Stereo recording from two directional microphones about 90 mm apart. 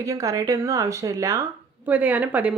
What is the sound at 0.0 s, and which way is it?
Speech, 35° right (ahead or behind).